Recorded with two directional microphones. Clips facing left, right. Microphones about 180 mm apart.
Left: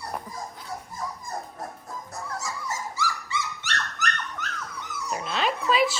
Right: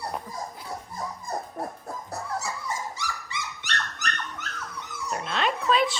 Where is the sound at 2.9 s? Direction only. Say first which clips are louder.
Left 5 dB; 15° right (ahead or behind).